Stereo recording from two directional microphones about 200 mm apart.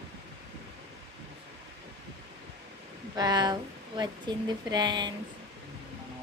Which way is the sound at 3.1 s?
20° right (ahead or behind).